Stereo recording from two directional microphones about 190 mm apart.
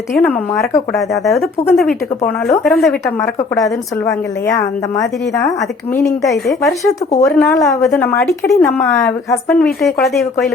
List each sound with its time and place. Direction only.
0.1 s a woman's voice: 5° left (ahead or behind)
4.0 s a woman's voice: 15° left (ahead or behind); by 10.5 s centre (ahead or behind)